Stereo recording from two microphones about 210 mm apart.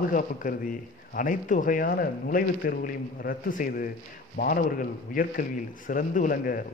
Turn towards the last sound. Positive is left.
turn(degrees=40)  # may be behind; listen again after turning